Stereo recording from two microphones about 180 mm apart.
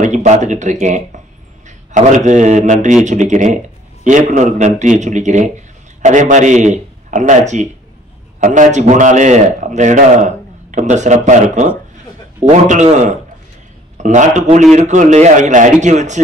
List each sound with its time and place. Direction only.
0.0 s a man's voice: 40° right (ahead or behind)